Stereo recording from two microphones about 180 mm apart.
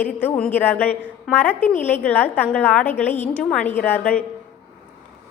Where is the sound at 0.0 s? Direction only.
10° left (ahead or behind).